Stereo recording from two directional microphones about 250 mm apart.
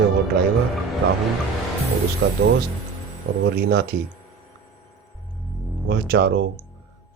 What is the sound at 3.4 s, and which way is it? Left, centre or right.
Speech, right.